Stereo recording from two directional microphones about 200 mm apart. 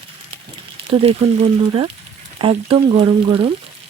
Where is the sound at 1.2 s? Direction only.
30° right (ahead or behind).